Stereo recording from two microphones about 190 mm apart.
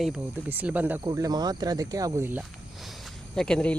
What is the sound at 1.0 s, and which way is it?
Speech, 20° right (ahead or behind).